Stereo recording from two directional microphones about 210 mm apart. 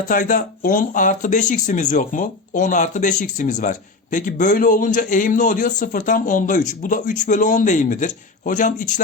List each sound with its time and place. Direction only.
0.1 s speech: 40° left (ahead or behind)